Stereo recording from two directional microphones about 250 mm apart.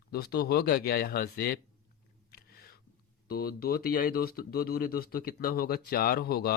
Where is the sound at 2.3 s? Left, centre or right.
Left.